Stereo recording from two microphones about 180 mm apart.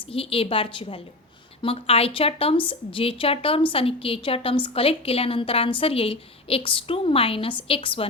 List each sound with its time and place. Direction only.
0.0 s a woman's voice: 30° left (ahead or behind)